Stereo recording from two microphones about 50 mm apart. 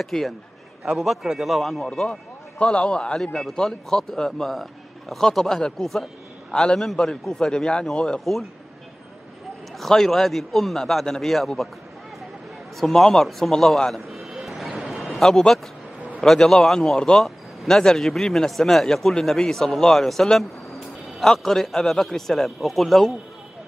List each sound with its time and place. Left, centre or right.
0.0 s a man's voice: centre
2.6 s a man's voice: centre
9.8 s a man's voice: centre
12.8 s a man's voice: centre
14.0 s vehicle: centre
14.9 s a sound: centre
15.2 s a man's voice: centre